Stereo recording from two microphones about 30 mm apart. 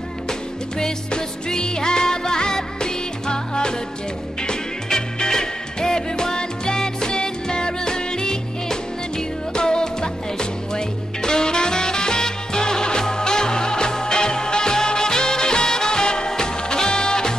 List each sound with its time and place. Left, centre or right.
0.3 s music: left